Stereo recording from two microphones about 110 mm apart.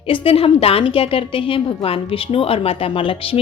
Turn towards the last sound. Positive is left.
turn(degrees=55)  # may be behind; listen again after turning